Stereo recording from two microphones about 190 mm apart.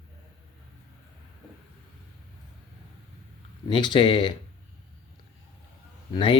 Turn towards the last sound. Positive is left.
turn(degrees=25)  # may be behind; listen again after turning